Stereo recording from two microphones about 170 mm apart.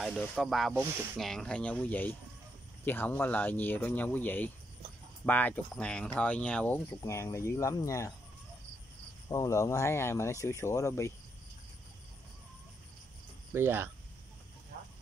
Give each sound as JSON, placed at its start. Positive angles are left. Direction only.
{"t": 0.0, "sound": "speech", "side_deg": 0}
{"t": 9.3, "sound": "speech", "side_deg": 20}
{"t": 13.5, "sound": "speech", "side_deg": -15}